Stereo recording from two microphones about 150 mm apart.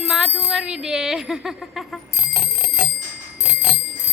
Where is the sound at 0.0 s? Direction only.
Centre (ahead or behind).